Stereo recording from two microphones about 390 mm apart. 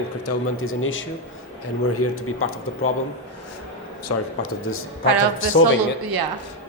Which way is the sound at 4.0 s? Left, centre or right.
Left.